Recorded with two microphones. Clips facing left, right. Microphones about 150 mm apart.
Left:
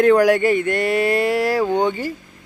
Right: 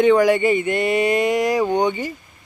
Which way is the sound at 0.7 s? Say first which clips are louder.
Even; centre (ahead or behind).